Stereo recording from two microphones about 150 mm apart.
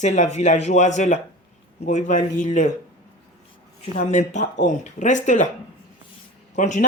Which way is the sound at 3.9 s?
50° left (ahead or behind).